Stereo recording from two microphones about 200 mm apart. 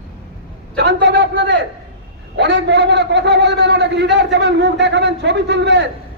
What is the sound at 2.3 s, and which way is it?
A man's voice, 60° right (ahead or behind).